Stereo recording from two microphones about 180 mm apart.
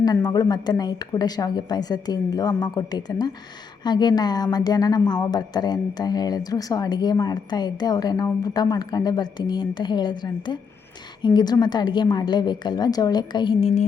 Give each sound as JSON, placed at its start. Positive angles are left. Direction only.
{"t": 0.0, "sound": "a woman's voice", "side_deg": 20}